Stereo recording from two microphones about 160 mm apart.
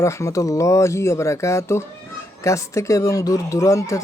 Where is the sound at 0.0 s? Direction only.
20° left (ahead or behind).